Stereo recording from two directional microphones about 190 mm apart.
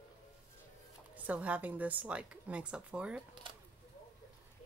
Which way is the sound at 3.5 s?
25° right (ahead or behind).